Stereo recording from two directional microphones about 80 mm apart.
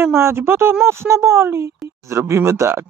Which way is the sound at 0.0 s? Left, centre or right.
Right.